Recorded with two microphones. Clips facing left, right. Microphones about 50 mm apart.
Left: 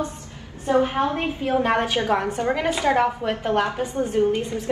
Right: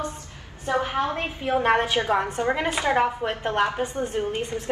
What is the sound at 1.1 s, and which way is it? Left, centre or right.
Speech, right.